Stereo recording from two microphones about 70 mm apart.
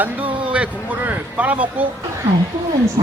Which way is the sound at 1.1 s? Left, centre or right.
Right.